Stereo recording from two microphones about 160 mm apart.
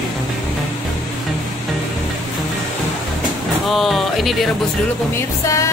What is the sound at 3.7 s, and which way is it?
Speech, centre (ahead or behind).